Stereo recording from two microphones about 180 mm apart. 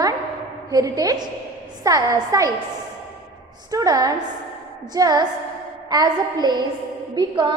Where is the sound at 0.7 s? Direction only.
20° right (ahead or behind).